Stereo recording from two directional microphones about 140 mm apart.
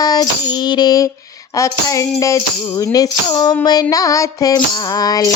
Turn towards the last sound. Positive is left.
turn(degrees=25)  # may be behind; listen again after turning